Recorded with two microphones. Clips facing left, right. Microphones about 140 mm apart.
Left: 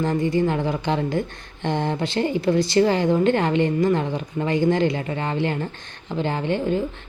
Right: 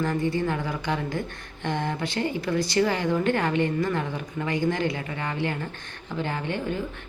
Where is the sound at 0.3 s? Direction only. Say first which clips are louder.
Left 6 dB; 25° left (ahead or behind).